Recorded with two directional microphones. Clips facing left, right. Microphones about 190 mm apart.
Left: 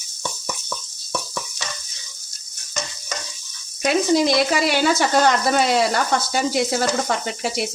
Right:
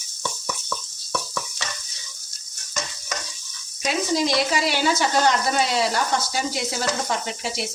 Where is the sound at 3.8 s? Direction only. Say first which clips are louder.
Left 5 dB; 55° left (ahead or behind).